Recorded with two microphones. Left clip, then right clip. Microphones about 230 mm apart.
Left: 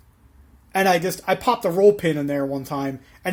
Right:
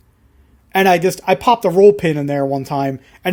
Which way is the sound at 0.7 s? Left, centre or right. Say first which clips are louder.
Right 6 dB; right.